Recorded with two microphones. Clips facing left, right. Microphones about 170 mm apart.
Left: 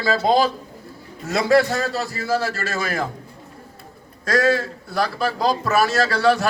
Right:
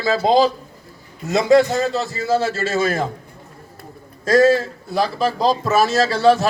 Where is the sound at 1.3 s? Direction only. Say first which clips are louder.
Right 3 dB; 20° right (ahead or behind).